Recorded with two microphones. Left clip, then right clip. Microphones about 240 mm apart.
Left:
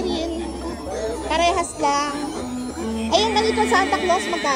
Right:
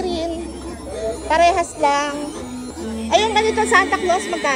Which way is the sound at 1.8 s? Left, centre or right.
Right.